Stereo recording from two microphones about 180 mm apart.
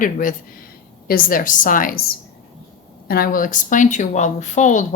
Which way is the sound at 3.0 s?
55° left (ahead or behind).